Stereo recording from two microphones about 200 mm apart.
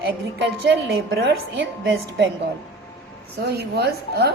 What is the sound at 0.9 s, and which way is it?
A woman's voice, 55° right (ahead or behind).